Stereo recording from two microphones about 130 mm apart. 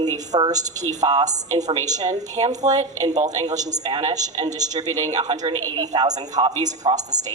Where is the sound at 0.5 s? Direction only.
65° right (ahead or behind).